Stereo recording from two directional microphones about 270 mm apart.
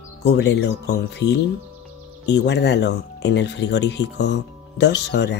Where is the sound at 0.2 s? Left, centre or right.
Left.